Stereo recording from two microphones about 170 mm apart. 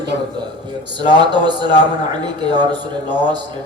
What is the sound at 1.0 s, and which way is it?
Speech, 25° right (ahead or behind).